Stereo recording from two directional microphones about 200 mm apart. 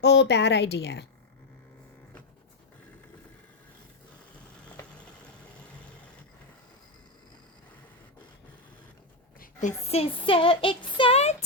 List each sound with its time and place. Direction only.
0.0 s a woman's voice: 60° left (ahead or behind)
9.4 s a sound: 40° left (ahead or behind)
9.8 s speech: 30° left (ahead or behind)